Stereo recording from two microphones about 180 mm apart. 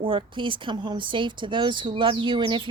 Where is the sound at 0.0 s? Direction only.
30° right (ahead or behind).